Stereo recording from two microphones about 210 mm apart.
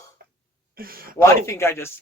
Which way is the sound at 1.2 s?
15° left (ahead or behind).